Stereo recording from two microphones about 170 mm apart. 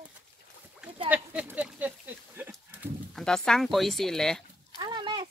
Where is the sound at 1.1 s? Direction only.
10° right (ahead or behind).